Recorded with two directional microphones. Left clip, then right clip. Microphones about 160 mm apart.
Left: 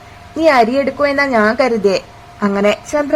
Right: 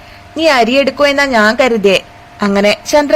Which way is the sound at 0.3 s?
Centre (ahead or behind).